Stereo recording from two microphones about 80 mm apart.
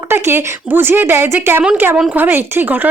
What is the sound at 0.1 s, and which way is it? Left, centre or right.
A woman's voice, right.